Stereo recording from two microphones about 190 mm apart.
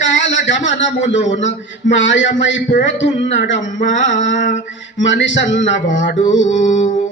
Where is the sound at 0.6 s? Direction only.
35° left (ahead or behind).